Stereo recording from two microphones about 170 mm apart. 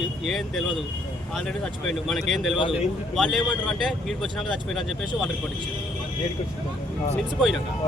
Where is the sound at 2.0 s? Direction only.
Centre (ahead or behind).